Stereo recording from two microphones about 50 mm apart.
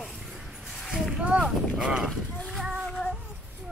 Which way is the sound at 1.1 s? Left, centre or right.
Right.